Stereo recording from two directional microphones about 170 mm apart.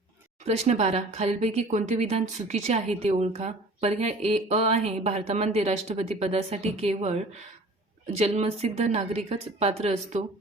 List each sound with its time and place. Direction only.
0.4 s speech: 40° right (ahead or behind)